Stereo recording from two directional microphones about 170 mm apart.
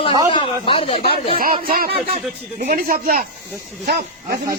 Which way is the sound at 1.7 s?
60° right (ahead or behind).